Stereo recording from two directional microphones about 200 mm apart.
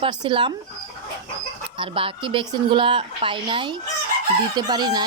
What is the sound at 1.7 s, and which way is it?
Speech, 25° right (ahead or behind).